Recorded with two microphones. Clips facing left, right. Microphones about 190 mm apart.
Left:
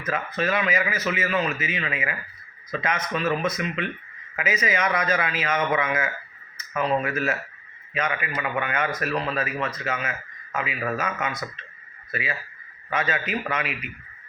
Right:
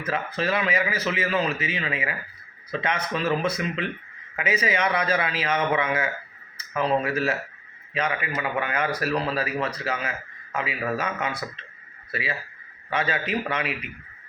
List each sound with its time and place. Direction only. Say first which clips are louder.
0.0 s a man's voice: even; 30° right (ahead or behind)